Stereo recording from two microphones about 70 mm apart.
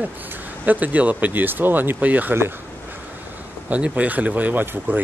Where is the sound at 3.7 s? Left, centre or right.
Right.